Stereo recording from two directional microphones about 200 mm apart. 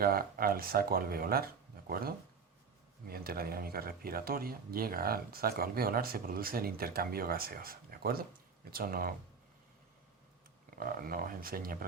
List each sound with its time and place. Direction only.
0.0 s speech: 45° right (ahead or behind)
10.8 s speech: 45° right (ahead or behind)